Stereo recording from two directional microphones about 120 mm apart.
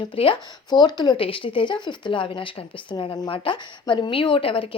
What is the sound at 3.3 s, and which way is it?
A woman's voice, 45° left (ahead or behind).